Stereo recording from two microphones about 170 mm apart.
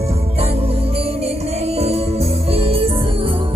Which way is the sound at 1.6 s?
35° right (ahead or behind).